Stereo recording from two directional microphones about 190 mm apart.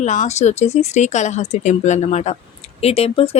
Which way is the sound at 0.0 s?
40° left (ahead or behind).